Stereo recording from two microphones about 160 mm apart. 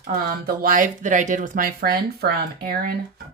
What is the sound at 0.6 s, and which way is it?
Speech, 55° right (ahead or behind).